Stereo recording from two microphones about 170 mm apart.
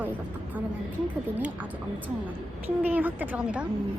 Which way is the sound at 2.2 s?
10° right (ahead or behind).